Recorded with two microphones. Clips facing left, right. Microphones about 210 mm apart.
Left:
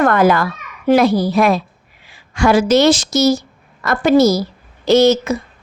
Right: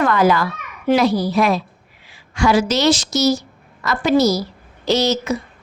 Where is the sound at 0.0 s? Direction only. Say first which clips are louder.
Left 3 dB; 50° left (ahead or behind).